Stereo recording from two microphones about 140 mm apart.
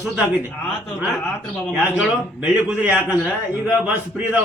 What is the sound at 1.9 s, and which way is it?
A man's voice, 5° right (ahead or behind).